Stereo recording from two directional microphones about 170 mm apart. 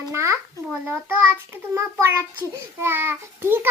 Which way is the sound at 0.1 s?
15° right (ahead or behind).